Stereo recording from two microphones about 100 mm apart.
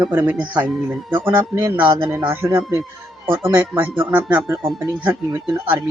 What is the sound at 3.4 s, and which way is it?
Speech, 15° right (ahead or behind).